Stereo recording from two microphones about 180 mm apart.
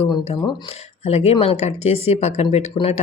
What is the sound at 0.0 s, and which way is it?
Speech, 30° left (ahead or behind).